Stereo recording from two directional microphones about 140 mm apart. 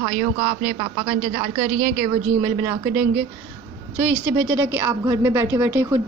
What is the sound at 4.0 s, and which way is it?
A woman's voice, 15° right (ahead or behind).